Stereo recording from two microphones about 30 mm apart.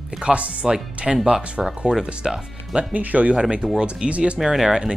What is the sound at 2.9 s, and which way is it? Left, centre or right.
Speech, right.